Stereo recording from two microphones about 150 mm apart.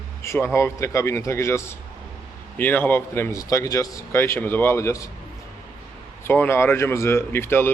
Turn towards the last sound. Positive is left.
turn(degrees=15)  # may be behind; listen again after turning